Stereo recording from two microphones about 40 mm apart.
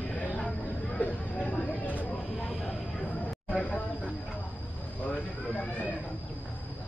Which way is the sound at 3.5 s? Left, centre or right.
Left.